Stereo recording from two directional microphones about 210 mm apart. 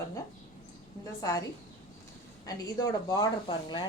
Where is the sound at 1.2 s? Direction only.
20° left (ahead or behind).